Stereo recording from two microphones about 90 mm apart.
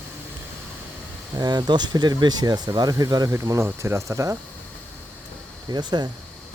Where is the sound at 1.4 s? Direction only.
50° right (ahead or behind).